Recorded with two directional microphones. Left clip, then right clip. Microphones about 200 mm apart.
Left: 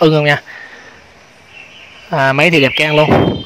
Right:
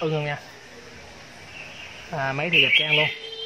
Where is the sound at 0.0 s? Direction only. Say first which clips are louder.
Left 16 dB; 50° left (ahead or behind).